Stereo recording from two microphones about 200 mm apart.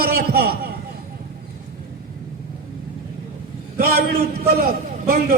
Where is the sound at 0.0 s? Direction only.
50° right (ahead or behind).